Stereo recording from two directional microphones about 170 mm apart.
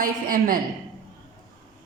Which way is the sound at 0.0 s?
55° right (ahead or behind).